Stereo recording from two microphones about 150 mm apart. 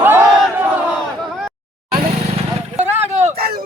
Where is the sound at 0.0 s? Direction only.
15° right (ahead or behind).